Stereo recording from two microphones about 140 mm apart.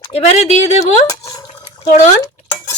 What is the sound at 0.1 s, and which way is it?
Speech, 50° left (ahead or behind).